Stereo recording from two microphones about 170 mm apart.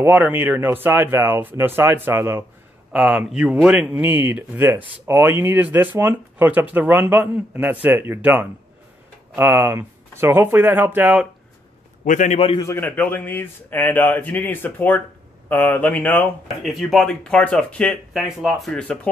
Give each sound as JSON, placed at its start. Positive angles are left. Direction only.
{"t": 0.0, "sound": "speech", "side_deg": -10}
{"t": 12.0, "sound": "a man's voice", "side_deg": 50}
{"t": 12.5, "sound": "speech", "side_deg": 15}